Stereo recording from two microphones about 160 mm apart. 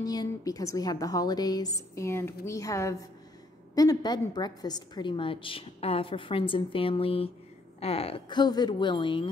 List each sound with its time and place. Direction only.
0.0 s a woman's voice: 25° left (ahead or behind)